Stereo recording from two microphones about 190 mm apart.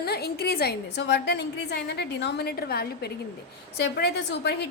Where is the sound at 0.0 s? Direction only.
55° left (ahead or behind).